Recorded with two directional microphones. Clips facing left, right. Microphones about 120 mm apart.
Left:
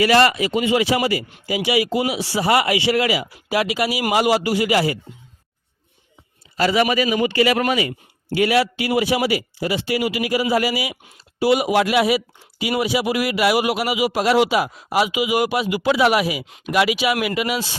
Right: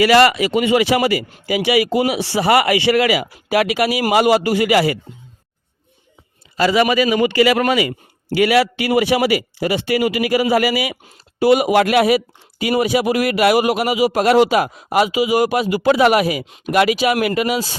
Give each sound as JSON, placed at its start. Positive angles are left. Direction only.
{"t": 0.0, "sound": "speech", "side_deg": -90}
{"t": 6.7, "sound": "a man's voice", "side_deg": -90}
{"t": 11.3, "sound": "speech", "side_deg": -50}
{"t": 15.1, "sound": "speech", "side_deg": -40}